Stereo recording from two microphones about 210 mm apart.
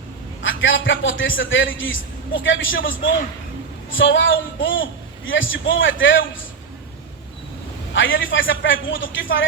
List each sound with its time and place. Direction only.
0.4 s a man's voice: 65° left (ahead or behind)
3.9 s a man's voice: 65° left (ahead or behind)
7.9 s a man's voice: 65° left (ahead or behind)